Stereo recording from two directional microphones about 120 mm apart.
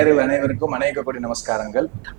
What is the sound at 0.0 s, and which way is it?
A man's voice, 15° right (ahead or behind).